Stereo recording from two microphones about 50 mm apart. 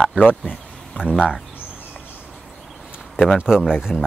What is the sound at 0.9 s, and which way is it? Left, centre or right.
Speech, centre.